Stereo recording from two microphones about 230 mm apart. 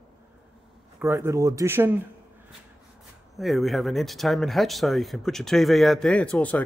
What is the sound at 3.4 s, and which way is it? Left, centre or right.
Speech, centre.